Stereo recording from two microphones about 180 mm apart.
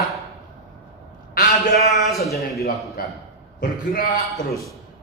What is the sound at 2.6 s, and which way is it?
A man's voice, 60° left (ahead or behind).